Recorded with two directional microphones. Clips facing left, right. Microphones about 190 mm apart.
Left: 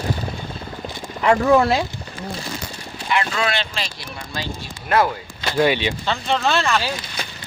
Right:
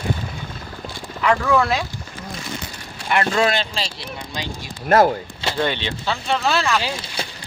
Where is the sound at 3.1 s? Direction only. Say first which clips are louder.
Right 3 dB; 50° right (ahead or behind).